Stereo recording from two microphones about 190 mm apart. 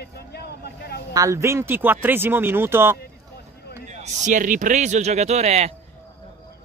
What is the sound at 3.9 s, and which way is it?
A man's voice, 40° right (ahead or behind).